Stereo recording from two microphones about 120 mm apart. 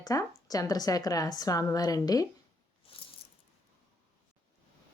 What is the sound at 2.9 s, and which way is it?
Coin, 50° left (ahead or behind).